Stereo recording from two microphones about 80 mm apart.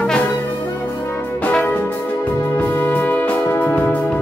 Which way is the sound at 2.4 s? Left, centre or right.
Left.